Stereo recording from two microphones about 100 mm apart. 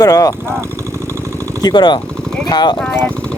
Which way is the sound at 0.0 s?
35° left (ahead or behind).